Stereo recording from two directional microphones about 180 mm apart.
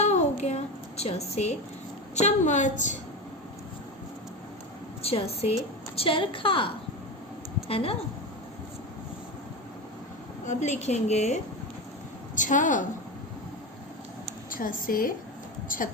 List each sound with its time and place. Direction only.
0.0 s a sound: 40° left (ahead or behind)
2.1 s a woman's voice: 40° left (ahead or behind)
5.0 s a woman's voice: 35° left (ahead or behind)
7.7 s a woman's voice: 30° left (ahead or behind)
10.4 s a woman's voice: 40° left (ahead or behind)
12.4 s a woman's voice: 45° left (ahead or behind)
14.5 s a woman's voice: 50° left (ahead or behind)